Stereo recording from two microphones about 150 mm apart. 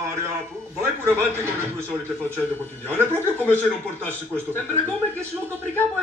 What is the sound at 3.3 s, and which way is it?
Speech, 10° left (ahead or behind).